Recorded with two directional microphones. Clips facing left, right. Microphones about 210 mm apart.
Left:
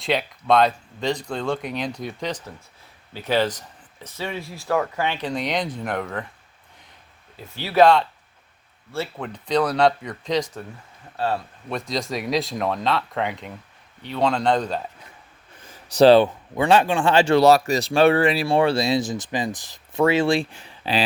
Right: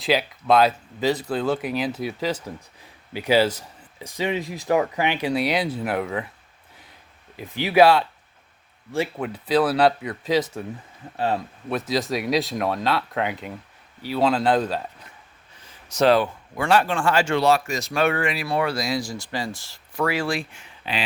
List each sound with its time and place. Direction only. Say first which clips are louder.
0.0 s speech: right 2 dB; centre (ahead or behind)
7.3 s speech: right 1 dB; 15° right (ahead or behind)
11.7 s speech: right 3 dB; 5° right (ahead or behind)
15.9 s speech: left 5 dB; 30° left (ahead or behind)
17.3 s speech: left 5 dB; 40° left (ahead or behind)